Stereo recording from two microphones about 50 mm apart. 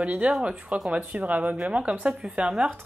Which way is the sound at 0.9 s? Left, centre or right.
Right.